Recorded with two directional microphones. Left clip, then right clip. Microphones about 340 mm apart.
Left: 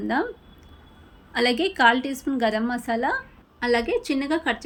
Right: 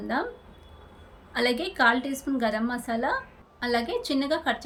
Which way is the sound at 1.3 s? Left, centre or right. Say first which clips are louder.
Left 4 dB; centre.